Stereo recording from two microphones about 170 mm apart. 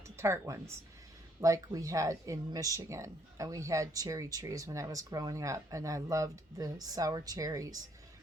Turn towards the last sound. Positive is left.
turn(degrees=-20)  # may be behind; listen again after turning